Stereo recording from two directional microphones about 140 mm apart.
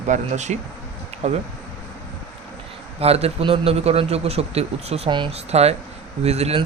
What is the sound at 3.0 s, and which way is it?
Speech, 45° right (ahead or behind).